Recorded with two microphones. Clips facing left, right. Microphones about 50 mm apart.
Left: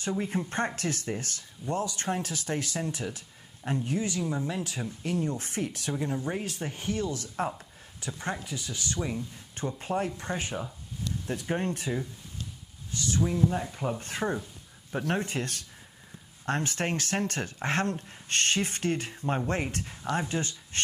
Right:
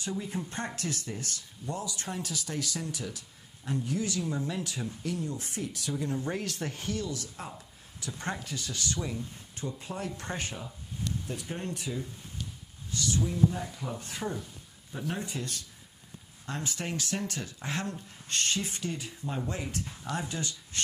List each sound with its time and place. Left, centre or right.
0.2 s speech: left
4.2 s speech: centre
5.0 s speech: left
6.0 s speech: centre
6.9 s speech: left
8.1 s speech: centre
8.8 s speech: left
10.1 s speech: centre
11.2 s speech: left
13.1 s speech: left
14.9 s speech: left